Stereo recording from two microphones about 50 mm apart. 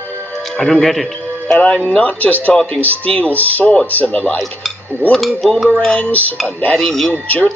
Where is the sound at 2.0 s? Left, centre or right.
Left.